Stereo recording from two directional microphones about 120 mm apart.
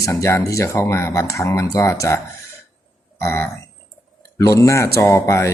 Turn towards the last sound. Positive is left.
turn(degrees=25)  # may be behind; listen again after turning